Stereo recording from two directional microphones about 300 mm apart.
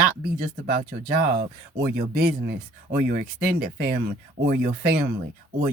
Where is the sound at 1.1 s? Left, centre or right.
Right.